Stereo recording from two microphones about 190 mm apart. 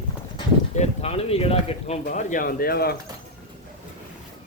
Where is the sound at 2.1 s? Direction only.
45° left (ahead or behind).